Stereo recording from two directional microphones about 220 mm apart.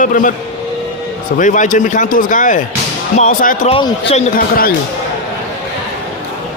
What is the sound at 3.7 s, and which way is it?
Speech, 25° left (ahead or behind).